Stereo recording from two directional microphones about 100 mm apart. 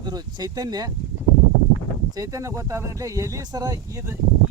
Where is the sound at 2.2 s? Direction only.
35° right (ahead or behind).